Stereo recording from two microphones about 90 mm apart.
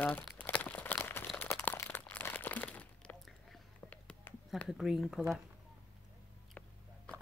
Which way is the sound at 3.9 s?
20° left (ahead or behind).